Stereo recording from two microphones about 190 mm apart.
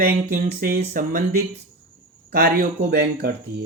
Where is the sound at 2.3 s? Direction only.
50° right (ahead or behind).